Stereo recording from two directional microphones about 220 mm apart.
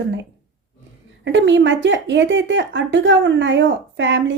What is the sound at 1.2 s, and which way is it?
Speech, 55° right (ahead or behind).